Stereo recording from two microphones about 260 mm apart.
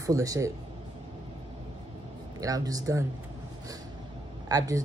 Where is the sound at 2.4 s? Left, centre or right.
Centre.